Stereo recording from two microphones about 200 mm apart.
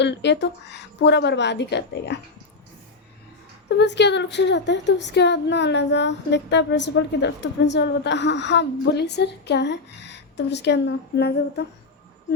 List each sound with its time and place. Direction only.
0.0 s speech: 60° left (ahead or behind)
3.8 s speech: 60° left (ahead or behind)